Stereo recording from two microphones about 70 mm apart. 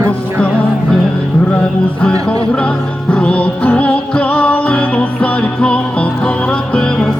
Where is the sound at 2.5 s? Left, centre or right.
Centre.